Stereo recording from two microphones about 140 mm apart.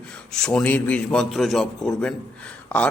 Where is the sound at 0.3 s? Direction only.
5° left (ahead or behind).